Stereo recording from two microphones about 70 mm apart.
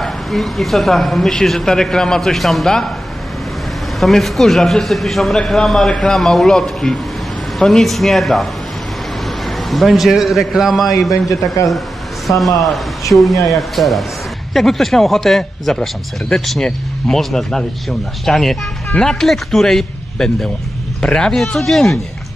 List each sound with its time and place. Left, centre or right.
0.0 s speech: centre
4.0 s speech: centre
9.7 s speech: centre
11.0 s a man's voice: left
12.3 s speech: centre